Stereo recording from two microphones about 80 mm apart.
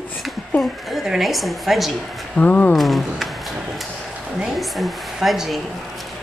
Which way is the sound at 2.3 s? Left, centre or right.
Centre.